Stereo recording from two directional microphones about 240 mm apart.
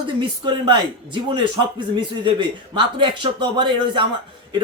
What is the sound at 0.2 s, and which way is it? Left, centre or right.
Speech, centre.